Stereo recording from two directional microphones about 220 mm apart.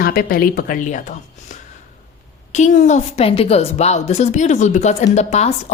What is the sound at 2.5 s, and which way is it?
Speech, 30° left (ahead or behind).